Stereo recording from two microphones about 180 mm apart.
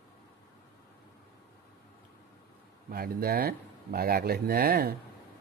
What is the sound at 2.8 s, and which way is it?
Speech, 55° right (ahead or behind).